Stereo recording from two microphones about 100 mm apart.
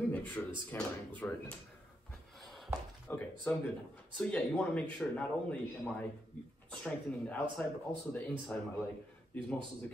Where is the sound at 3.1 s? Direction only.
20° left (ahead or behind).